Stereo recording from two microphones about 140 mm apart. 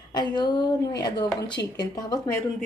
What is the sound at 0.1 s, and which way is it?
A woman's voice, 30° left (ahead or behind).